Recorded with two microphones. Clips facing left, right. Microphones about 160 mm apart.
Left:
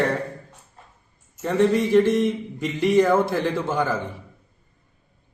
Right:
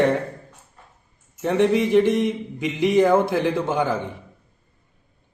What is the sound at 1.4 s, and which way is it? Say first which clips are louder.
A man's voice: right 1 dB; 15° right (ahead or behind).